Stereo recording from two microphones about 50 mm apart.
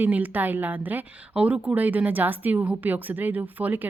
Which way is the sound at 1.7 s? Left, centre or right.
Right.